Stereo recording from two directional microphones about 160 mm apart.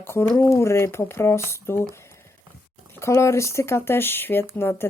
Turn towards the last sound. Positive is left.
turn(degrees=15)  # may be behind; listen again after turning